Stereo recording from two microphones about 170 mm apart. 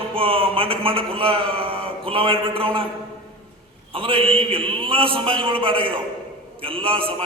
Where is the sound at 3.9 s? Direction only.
30° right (ahead or behind).